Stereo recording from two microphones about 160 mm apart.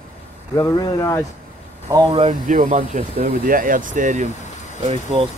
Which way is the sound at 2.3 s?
55° right (ahead or behind).